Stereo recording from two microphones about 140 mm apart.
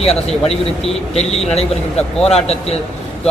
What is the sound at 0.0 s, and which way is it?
Speech, 45° left (ahead or behind).